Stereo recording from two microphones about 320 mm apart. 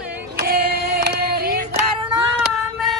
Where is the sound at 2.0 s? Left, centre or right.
Centre.